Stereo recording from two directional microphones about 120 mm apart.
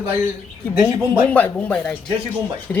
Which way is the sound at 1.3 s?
15° left (ahead or behind).